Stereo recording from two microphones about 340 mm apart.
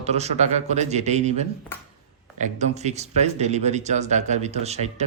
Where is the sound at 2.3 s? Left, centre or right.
Right.